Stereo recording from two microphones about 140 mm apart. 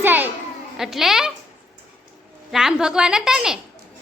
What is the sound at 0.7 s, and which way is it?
Speech, centre (ahead or behind).